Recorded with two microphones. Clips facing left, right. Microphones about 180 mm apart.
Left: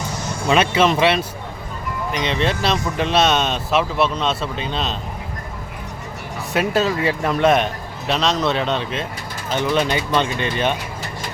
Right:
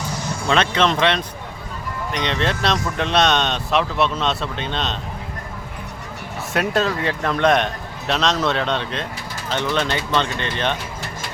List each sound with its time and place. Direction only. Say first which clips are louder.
0.4 s speech: left 2 dB; 10° left (ahead or behind)
6.5 s speech: left 1 dB; centre (ahead or behind)